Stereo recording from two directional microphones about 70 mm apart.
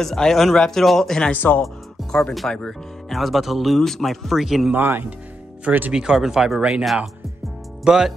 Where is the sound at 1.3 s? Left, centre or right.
Left.